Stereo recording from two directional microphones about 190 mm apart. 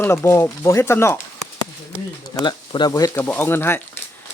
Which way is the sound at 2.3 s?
25° left (ahead or behind).